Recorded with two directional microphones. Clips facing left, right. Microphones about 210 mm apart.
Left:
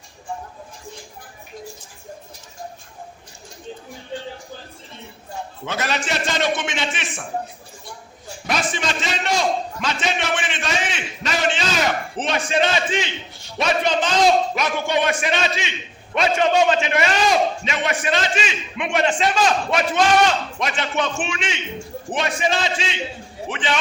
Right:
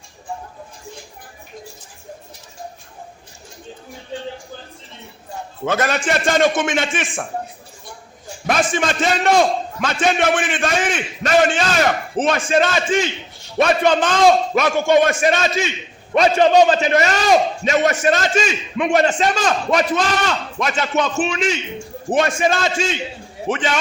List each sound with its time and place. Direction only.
5.6 s a man's voice: 50° right (ahead or behind)
8.4 s a man's voice: 50° right (ahead or behind)